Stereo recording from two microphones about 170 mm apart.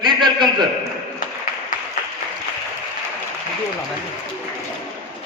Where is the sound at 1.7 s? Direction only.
50° left (ahead or behind).